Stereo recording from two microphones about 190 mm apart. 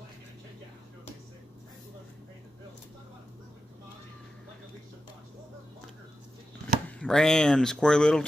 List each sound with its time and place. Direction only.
6.9 s speech: 5° left (ahead or behind)